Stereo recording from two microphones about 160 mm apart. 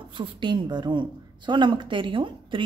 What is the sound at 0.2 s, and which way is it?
A woman's voice, 30° right (ahead or behind).